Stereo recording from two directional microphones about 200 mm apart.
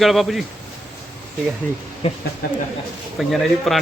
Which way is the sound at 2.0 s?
30° left (ahead or behind).